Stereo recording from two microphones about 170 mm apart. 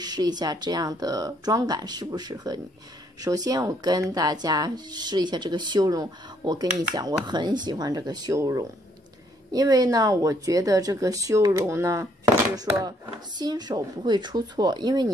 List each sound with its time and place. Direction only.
0.0 s speech: 25° right (ahead or behind)